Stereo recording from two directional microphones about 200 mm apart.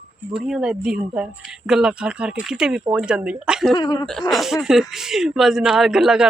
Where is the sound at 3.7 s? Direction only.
20° left (ahead or behind).